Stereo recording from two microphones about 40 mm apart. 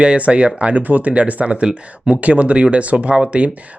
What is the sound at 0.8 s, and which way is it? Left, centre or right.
Speech, right.